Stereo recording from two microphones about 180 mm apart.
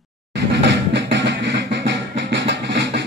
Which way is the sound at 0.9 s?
75° right (ahead or behind).